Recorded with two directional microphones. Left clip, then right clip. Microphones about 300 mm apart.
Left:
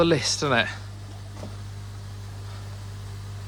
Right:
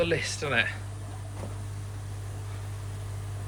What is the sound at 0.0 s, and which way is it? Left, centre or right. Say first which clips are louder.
Speech: left 6 dB; centre.